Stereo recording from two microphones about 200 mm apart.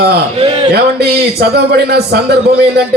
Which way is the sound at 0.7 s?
55° right (ahead or behind).